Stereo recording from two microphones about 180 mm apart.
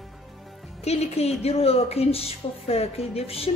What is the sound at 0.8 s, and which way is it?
A woman's voice, 35° left (ahead or behind).